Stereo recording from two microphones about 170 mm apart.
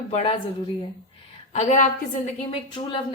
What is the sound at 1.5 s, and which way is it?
Speech, 45° left (ahead or behind).